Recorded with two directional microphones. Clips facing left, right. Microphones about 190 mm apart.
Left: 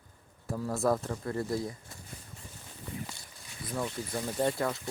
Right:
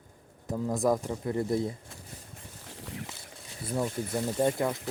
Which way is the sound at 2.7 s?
90° right.